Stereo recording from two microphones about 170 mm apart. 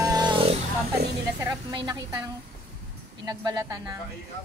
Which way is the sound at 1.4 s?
25° right (ahead or behind).